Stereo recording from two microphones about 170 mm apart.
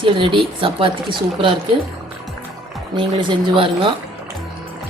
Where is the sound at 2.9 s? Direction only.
30° right (ahead or behind).